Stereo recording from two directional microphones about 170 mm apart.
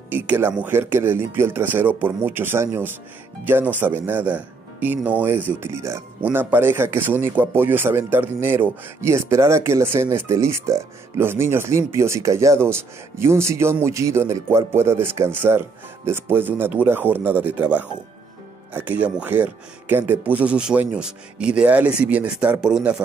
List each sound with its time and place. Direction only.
0.1 s speech: 10° right (ahead or behind)